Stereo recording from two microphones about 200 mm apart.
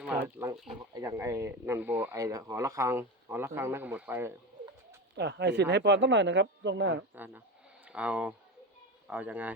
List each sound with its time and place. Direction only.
0.0 s speech: 10° right (ahead or behind)
5.1 s speech: 60° right (ahead or behind)
7.9 s speech: 5° right (ahead or behind)